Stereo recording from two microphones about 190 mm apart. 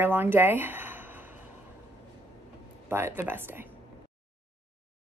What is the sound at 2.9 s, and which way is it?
Speech, 15° right (ahead or behind).